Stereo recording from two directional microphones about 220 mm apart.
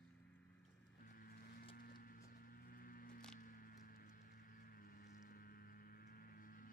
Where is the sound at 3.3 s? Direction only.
40° left (ahead or behind).